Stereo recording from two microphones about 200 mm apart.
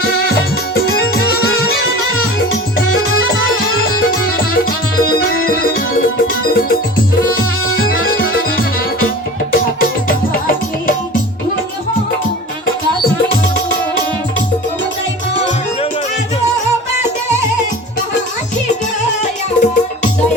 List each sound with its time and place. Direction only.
0.9 s music: 50° left (ahead or behind)
5.1 s music: 50° left (ahead or behind)
7.8 s music: 45° left (ahead or behind)
10.1 s music: 45° left (ahead or behind)
19.5 s music: 40° left (ahead or behind)